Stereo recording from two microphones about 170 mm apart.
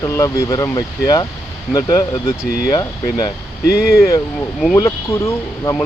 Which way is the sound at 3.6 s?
65° left (ahead or behind).